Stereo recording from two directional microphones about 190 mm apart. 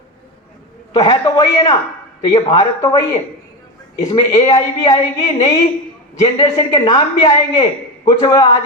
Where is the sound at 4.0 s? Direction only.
20° left (ahead or behind).